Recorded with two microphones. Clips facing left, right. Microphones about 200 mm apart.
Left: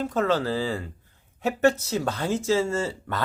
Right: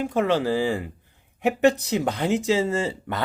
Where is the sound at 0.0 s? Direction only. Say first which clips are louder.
Right 2 dB; 15° right (ahead or behind).